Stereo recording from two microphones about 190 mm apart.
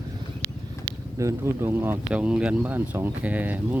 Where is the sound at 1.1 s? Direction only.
15° right (ahead or behind).